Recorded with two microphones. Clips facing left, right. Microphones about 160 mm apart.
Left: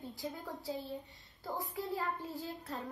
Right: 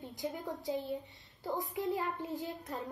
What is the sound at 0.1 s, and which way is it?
A woman's voice, 15° right (ahead or behind).